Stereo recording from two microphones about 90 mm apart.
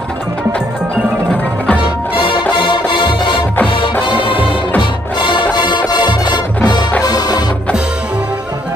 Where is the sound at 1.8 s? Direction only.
75° left (ahead or behind); by 7.5 s 50° left (ahead or behind).